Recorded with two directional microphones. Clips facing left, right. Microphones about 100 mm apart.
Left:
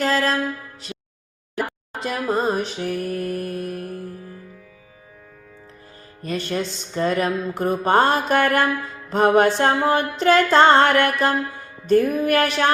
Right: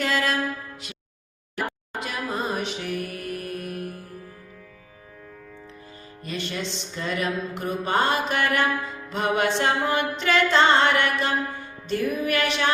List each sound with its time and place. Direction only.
0.0 s music: 35° left (ahead or behind)
2.0 s music: 35° left (ahead or behind)
6.2 s mantra: 45° left (ahead or behind)
9.0 s music: 45° left (ahead or behind)
9.6 s mantra: 40° left (ahead or behind)